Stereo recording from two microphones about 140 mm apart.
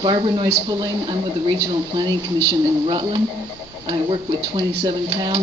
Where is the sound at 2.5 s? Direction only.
35° right (ahead or behind).